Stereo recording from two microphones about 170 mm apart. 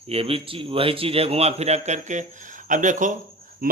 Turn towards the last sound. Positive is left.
turn(degrees=-60)  # may be behind; listen again after turning